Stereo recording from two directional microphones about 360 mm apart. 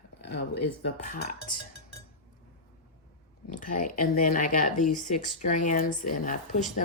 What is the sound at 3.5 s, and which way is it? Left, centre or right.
Speech, left.